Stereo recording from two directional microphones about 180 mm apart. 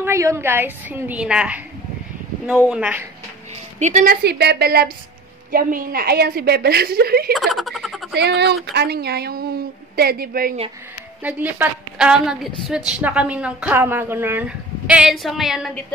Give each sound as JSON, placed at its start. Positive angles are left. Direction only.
{"t": 0.0, "sound": "a woman's voice", "side_deg": -15}
{"t": 2.7, "sound": "a woman's voice", "side_deg": -5}
{"t": 3.8, "sound": "a woman's voice", "side_deg": -45}
{"t": 7.3, "sound": "speech", "side_deg": 0}
{"t": 8.1, "sound": "a woman's voice", "side_deg": -70}
{"t": 11.2, "sound": "a woman's voice", "side_deg": -10}
{"t": 14.9, "sound": "a sound", "side_deg": -5}